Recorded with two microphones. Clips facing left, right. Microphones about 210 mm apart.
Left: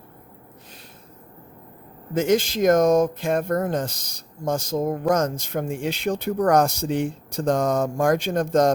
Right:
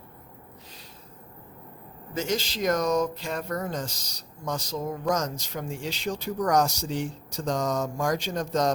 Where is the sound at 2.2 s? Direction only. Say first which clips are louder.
Left 9 dB; 55° left (ahead or behind).